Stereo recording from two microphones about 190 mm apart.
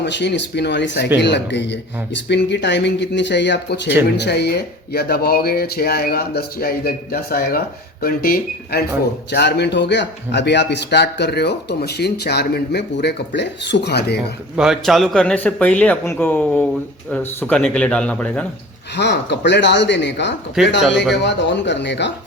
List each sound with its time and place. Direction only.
0.0 s speech: 65° left (ahead or behind)
9.3 s speech: 65° left (ahead or behind)
14.5 s speech: 5° right (ahead or behind)
18.9 s speech: 65° left (ahead or behind)
20.6 s speech: centre (ahead or behind)
21.2 s speech: 65° left (ahead or behind)